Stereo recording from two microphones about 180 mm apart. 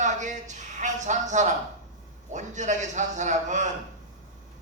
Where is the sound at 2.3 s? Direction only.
40° right (ahead or behind).